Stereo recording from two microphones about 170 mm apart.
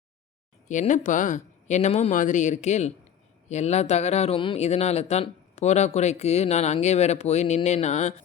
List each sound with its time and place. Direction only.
0.7 s speech: 45° left (ahead or behind)